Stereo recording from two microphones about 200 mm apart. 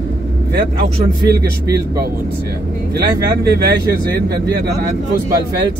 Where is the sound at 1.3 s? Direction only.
50° right (ahead or behind).